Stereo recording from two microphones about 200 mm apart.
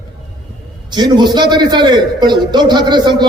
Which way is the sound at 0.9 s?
20° right (ahead or behind).